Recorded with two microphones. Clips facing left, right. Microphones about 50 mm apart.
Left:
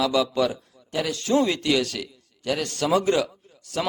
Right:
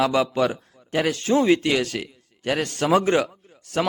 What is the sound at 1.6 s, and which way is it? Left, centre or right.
A man's voice, right.